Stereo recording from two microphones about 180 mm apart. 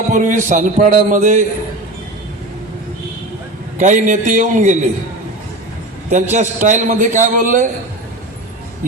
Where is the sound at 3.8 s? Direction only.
45° right (ahead or behind).